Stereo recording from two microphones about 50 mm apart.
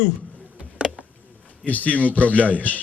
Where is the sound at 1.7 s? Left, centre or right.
Left.